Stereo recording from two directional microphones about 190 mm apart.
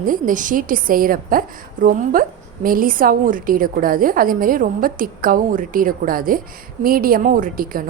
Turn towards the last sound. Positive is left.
turn(degrees=-45)  # may be behind; listen again after turning